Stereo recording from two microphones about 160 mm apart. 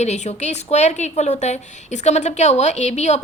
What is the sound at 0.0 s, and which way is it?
A woman's voice, 45° left (ahead or behind).